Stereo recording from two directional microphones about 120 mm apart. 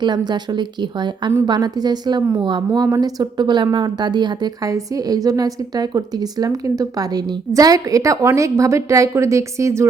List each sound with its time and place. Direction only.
0.0 s speech: 40° right (ahead or behind)